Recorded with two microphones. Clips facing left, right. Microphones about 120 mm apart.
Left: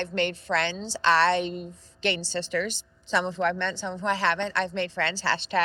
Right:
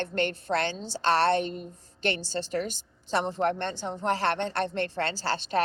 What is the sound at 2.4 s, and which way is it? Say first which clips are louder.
Speech: left 2 dB; 70° left (ahead or behind).